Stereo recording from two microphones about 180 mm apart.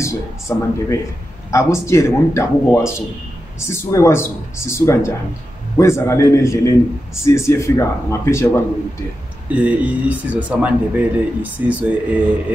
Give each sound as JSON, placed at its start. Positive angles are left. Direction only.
{"t": 0.0, "sound": "speech", "side_deg": 15}
{"t": 9.5, "sound": "speech", "side_deg": -10}